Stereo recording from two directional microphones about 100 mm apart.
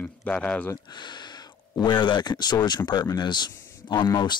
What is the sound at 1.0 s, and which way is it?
Speech, 50° left (ahead or behind).